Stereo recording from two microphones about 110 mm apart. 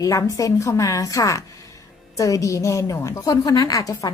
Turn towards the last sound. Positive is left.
turn(degrees=30)  # may be behind; listen again after turning